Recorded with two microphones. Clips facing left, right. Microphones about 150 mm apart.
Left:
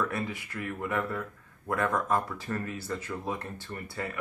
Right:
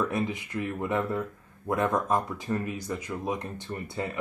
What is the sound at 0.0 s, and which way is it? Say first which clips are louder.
Speech: right 3 dB; 20° right (ahead or behind).